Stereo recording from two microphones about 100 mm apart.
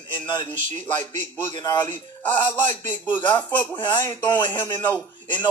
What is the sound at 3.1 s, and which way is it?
A man's voice, 50° left (ahead or behind).